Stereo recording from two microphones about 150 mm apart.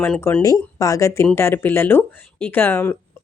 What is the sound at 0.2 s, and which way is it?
Speech, 15° left (ahead or behind).